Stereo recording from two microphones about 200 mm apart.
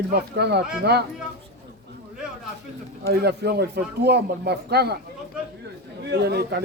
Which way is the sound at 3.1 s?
55° right (ahead or behind).